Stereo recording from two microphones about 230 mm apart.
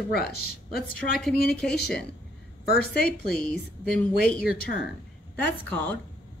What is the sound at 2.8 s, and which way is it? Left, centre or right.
A woman's voice, centre.